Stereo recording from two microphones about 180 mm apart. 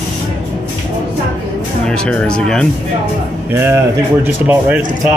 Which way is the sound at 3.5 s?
15° right (ahead or behind).